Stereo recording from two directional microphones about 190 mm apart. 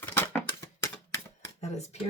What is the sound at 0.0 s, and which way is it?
Typewriter, 10° left (ahead or behind).